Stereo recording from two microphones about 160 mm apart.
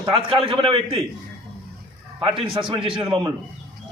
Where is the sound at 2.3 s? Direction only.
35° right (ahead or behind).